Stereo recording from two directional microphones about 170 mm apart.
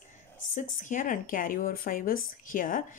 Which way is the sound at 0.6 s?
50° left (ahead or behind).